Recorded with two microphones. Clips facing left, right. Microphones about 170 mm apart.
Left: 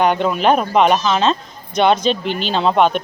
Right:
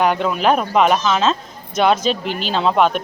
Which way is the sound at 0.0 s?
Centre (ahead or behind).